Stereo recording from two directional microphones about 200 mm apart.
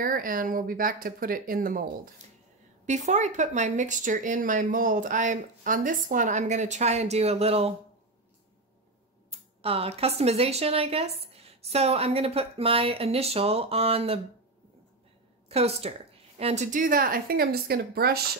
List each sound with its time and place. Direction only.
0.0 s speech: 45° right (ahead or behind)
2.9 s speech: 35° right (ahead or behind)
9.3 s speech: 30° right (ahead or behind)
15.4 s a woman's voice: 30° right (ahead or behind); by 18.2 s 50° right (ahead or behind)